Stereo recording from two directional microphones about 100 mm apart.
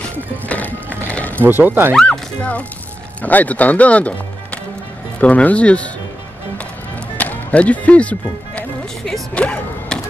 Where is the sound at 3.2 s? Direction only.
15° left (ahead or behind).